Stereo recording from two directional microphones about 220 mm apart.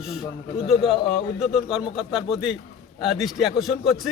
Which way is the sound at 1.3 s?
Centre (ahead or behind).